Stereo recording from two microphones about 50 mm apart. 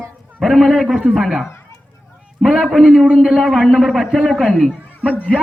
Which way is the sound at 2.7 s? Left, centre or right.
Centre.